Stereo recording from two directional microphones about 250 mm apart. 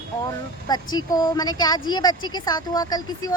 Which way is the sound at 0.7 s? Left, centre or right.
Centre.